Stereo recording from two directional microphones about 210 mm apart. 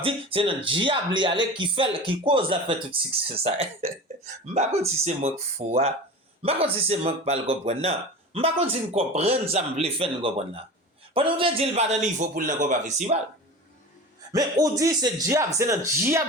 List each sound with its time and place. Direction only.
0.0 s a man's voice: 25° right (ahead or behind)
14.3 s speech: 15° right (ahead or behind)